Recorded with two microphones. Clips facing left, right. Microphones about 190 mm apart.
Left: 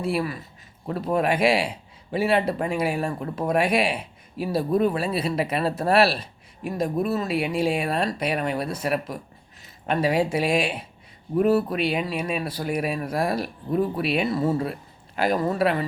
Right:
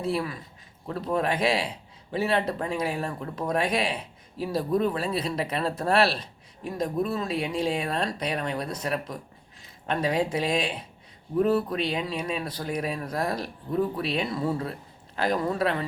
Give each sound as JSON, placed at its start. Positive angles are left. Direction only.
{"t": 0.0, "sound": "speech", "side_deg": 10}